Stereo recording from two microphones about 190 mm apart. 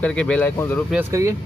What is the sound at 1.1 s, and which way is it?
Speech, 15° right (ahead or behind).